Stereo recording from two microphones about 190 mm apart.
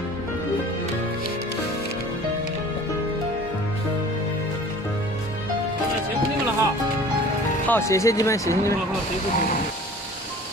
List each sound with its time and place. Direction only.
7.6 s speech: 10° left (ahead or behind)